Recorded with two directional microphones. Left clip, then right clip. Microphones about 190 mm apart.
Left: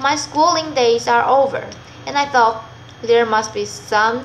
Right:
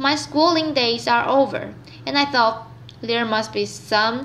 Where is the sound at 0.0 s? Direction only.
45° right (ahead or behind).